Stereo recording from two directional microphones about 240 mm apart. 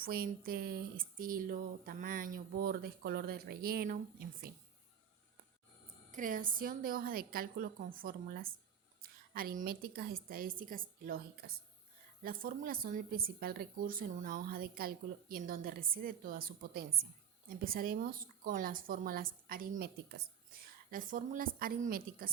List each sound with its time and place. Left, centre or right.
0.0 s speech: right
6.1 s speech: right